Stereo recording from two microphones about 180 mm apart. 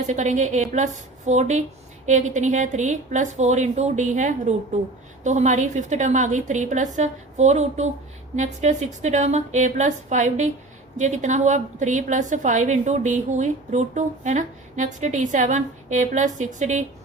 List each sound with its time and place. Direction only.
0.1 s a woman's voice: 40° right (ahead or behind)